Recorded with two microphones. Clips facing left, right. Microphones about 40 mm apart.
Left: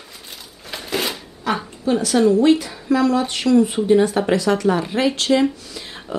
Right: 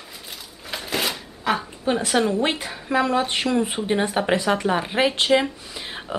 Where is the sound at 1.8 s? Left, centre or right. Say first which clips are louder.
Left 5 dB; right.